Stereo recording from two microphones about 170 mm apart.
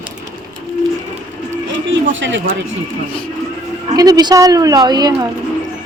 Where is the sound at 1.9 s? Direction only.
90° right.